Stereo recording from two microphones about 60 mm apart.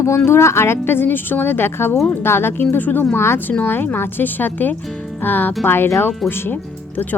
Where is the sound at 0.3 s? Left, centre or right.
Left.